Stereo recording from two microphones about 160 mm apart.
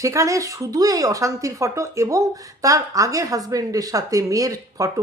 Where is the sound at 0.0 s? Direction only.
20° right (ahead or behind).